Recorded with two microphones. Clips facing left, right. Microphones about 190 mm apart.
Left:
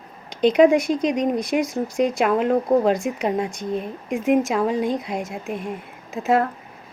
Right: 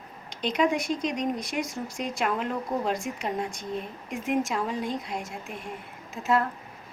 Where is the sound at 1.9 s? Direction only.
60° left (ahead or behind).